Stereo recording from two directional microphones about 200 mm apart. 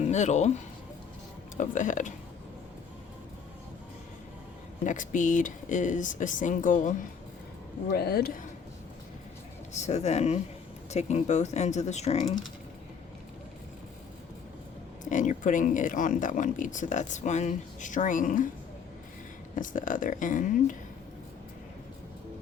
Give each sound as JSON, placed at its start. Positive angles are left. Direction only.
{"t": 0.0, "sound": "speech", "side_deg": 35}
{"t": 4.8, "sound": "speech", "side_deg": 40}
{"t": 7.9, "sound": "speech", "side_deg": 50}
{"t": 9.8, "sound": "speech", "side_deg": 35}
{"t": 15.1, "sound": "speech", "side_deg": 40}
{"t": 19.5, "sound": "speech", "side_deg": 40}